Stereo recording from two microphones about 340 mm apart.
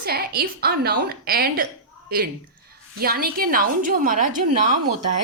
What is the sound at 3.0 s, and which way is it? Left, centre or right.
Speech, right.